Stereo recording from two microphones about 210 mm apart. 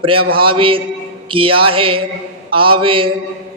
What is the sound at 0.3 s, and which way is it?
Speech, 25° right (ahead or behind).